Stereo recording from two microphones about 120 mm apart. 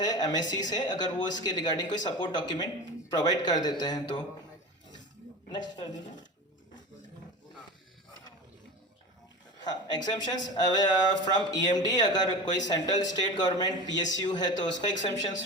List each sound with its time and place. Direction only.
0.0 s speech: 35° left (ahead or behind)
5.5 s speech: 35° left (ahead or behind)
9.6 s speech: 35° left (ahead or behind)